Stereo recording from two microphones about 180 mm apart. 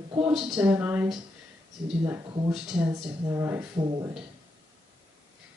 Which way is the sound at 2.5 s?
5° right (ahead or behind).